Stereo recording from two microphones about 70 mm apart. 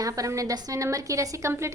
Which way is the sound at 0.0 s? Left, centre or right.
Right.